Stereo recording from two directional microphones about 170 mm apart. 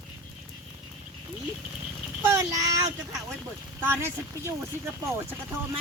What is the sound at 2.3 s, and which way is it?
Child singing, 20° right (ahead or behind).